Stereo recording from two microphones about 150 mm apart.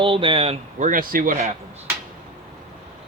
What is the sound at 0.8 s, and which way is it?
Speech, 70° right (ahead or behind).